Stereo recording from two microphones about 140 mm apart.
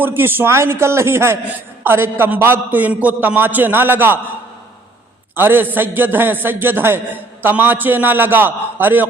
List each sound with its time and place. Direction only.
0.0 s a man's voice: 15° right (ahead or behind)
5.4 s a man's voice: 15° right (ahead or behind)